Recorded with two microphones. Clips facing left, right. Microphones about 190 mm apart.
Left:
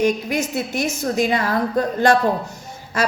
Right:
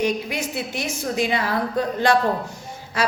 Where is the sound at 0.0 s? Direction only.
45° left (ahead or behind).